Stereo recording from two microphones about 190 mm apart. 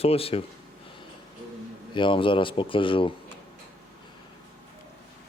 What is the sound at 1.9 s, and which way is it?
Speech, 25° left (ahead or behind).